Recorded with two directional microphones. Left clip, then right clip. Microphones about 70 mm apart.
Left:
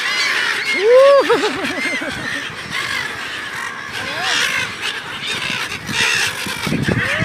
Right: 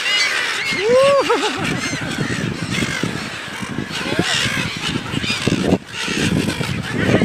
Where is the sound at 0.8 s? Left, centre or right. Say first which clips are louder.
Left 4 dB; centre.